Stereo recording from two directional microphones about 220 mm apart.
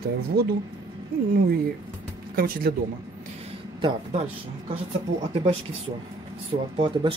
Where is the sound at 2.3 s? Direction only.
40° right (ahead or behind).